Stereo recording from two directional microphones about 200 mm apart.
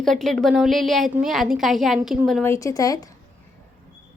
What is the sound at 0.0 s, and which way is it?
A woman's voice, centre (ahead or behind).